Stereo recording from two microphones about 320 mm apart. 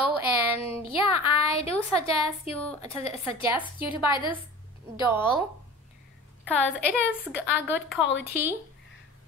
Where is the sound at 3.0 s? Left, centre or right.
Centre.